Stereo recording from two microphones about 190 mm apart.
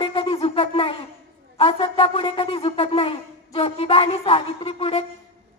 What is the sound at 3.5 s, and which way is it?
Speech, 30° left (ahead or behind).